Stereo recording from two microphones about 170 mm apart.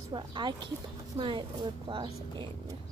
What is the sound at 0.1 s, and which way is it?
A woman's voice, 30° right (ahead or behind).